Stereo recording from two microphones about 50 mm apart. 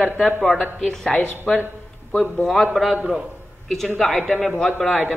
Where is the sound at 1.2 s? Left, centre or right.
Left.